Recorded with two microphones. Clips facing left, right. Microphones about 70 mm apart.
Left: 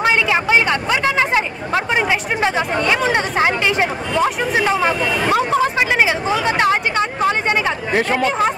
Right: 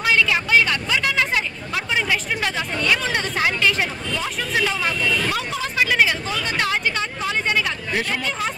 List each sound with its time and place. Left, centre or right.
0.0 s chatter: left
4.6 s speech: left
5.5 s hubbub: left